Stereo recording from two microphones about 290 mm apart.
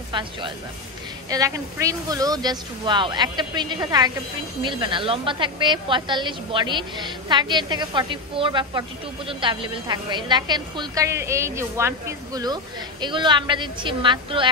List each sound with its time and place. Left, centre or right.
0.1 s a woman's voice: centre